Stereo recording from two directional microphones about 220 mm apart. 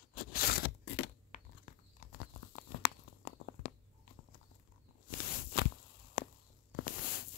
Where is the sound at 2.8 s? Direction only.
45° left (ahead or behind).